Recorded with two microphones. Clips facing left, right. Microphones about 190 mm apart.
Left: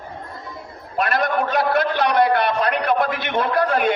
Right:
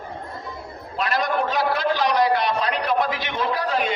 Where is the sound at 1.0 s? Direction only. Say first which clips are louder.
Left 3 dB; 60° left (ahead or behind).